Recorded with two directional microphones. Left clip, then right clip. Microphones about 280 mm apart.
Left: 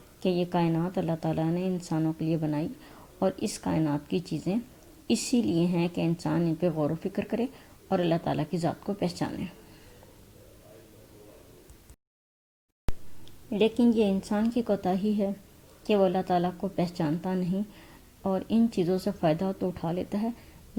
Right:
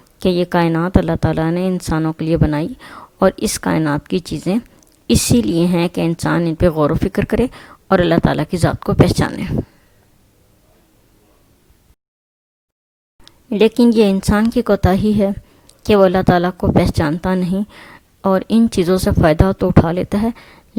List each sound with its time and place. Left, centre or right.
0.2 s a woman's voice: right
13.2 s a woman's voice: right